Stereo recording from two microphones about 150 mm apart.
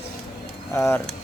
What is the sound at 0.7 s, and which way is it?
Speech, 20° left (ahead or behind).